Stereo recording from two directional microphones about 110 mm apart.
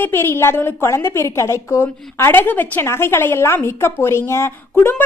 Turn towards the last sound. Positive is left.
turn(degrees=20)  # may be behind; listen again after turning